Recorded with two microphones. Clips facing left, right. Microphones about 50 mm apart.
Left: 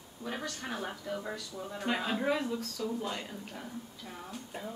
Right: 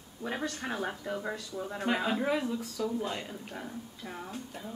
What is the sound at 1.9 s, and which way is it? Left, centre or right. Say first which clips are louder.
Speech: right 2 dB; centre.